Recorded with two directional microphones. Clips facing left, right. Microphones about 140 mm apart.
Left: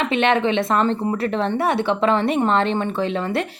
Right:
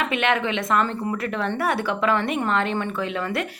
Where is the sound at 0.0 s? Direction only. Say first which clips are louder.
Left 4 dB; 25° left (ahead or behind).